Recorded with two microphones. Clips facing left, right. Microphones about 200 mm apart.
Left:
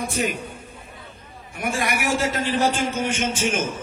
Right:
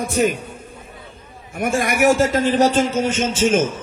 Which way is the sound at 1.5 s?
45° right (ahead or behind).